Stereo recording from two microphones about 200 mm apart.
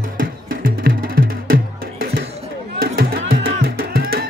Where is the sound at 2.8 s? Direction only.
50° right (ahead or behind).